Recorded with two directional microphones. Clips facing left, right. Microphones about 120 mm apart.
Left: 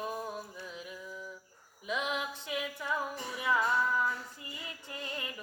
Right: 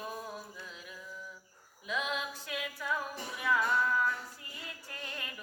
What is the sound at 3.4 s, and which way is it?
Music, 20° left (ahead or behind).